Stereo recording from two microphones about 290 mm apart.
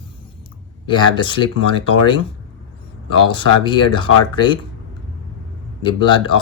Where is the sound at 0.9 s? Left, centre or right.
Centre.